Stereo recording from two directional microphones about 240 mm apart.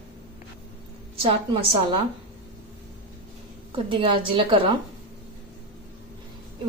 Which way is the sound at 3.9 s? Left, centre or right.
Right.